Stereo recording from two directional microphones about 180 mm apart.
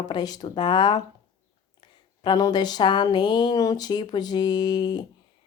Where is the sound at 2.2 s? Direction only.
25° left (ahead or behind).